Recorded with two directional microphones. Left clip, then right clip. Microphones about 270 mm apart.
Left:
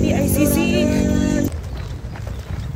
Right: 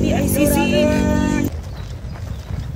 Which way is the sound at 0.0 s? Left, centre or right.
Centre.